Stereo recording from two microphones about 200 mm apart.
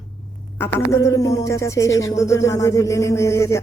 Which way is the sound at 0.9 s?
15° left (ahead or behind).